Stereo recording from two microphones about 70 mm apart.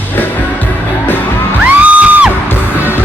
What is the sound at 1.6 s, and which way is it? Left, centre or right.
Music, right.